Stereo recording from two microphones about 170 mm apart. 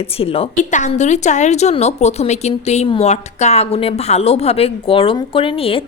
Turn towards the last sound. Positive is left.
turn(degrees=35)  # may be behind; listen again after turning